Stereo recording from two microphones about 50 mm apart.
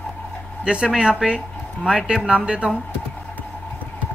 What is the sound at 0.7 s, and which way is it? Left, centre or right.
Speech, centre.